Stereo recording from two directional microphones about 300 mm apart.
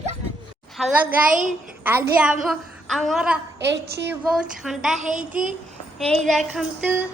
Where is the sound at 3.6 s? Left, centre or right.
Right.